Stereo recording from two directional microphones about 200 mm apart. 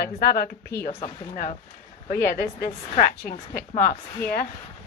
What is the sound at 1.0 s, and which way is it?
A woman's voice, 35° left (ahead or behind).